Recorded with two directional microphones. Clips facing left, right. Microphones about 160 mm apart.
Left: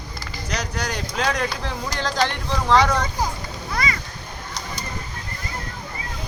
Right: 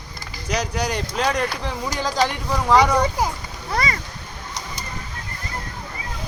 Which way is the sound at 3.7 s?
40° right (ahead or behind).